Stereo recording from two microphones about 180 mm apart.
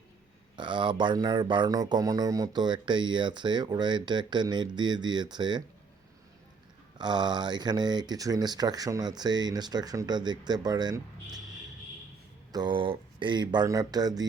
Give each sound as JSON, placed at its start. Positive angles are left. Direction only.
{"t": 0.5, "sound": "speech", "side_deg": -25}
{"t": 7.0, "sound": "speech", "side_deg": -25}
{"t": 12.5, "sound": "speech", "side_deg": -25}